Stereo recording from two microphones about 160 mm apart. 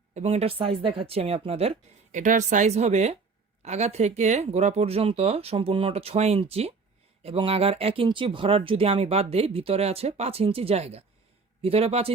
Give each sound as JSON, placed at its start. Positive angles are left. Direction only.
{"t": 0.1, "sound": "speech", "side_deg": -40}
{"t": 2.1, "sound": "speech", "side_deg": -50}